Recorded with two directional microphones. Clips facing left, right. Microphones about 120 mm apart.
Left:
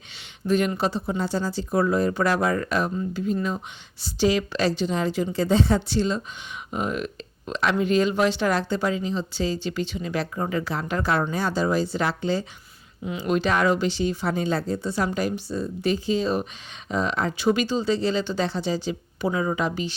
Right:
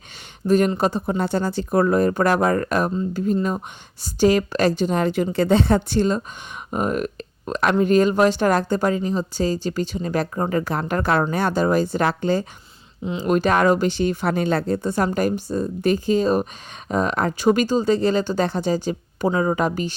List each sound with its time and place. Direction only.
0.4 s speech: 45° right (ahead or behind)